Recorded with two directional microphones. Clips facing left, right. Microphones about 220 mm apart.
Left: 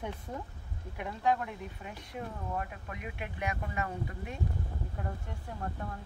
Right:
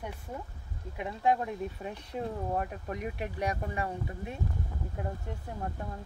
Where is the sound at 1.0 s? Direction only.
25° right (ahead or behind).